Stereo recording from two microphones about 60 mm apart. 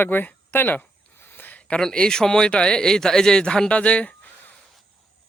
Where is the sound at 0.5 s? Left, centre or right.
Left.